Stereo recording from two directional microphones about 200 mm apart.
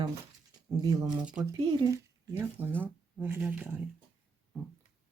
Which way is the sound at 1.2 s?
5° right (ahead or behind).